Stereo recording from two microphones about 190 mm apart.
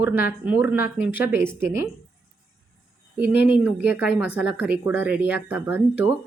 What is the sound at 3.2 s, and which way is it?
Speech, 10° right (ahead or behind).